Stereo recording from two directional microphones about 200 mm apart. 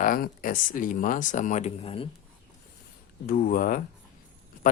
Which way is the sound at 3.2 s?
45° left (ahead or behind).